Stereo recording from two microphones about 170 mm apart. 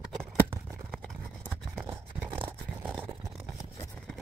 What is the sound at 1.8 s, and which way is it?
Toothbrush, 10° right (ahead or behind).